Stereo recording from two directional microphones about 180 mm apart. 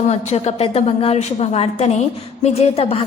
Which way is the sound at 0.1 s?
40° left (ahead or behind).